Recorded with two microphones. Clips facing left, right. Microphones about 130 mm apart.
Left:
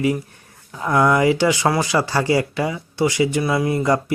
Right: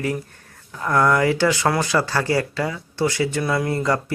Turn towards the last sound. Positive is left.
turn(degrees=15)  # may be behind; listen again after turning